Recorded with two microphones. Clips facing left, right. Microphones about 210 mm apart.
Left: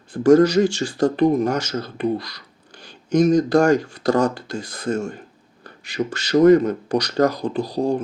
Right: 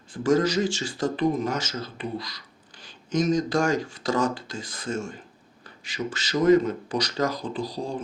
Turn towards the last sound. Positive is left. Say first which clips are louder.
# left 9 dB
turn(degrees=65)  # may be behind; listen again after turning